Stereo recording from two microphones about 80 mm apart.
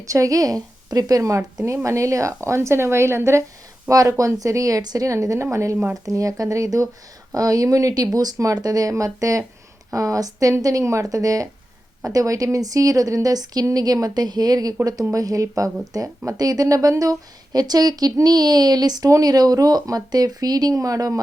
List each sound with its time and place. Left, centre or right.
0.0 s a woman's voice: right
3.8 s a woman's voice: right